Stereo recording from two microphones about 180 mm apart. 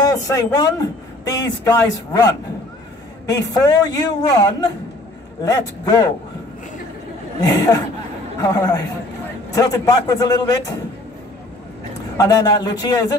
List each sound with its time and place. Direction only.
0.0 s a sound: 20° left (ahead or behind)
1.6 s a man's voice: 20° left (ahead or behind)
3.3 s a man's voice: 20° left (ahead or behind)
7.3 s a man's voice: 20° left (ahead or behind)
12.2 s a man's voice: 20° left (ahead or behind)